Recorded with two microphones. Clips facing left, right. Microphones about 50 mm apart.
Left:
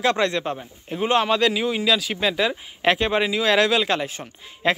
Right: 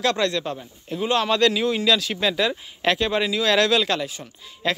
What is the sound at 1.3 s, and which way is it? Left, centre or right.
Speech, centre.